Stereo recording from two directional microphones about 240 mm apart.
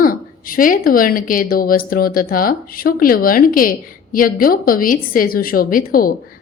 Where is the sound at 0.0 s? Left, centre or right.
Left.